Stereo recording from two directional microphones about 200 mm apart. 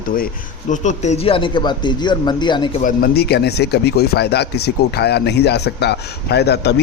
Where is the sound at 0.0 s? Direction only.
45° left (ahead or behind); by 2.8 s 25° left (ahead or behind).